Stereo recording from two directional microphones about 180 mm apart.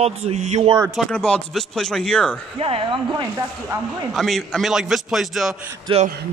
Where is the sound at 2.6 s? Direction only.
30° right (ahead or behind).